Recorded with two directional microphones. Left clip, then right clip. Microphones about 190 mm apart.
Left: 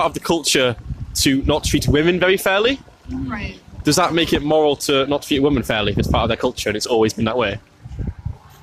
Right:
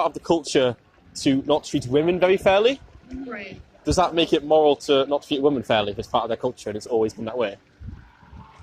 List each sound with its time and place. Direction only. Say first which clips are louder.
0.0 s speech: left 3 dB; 40° left (ahead or behind)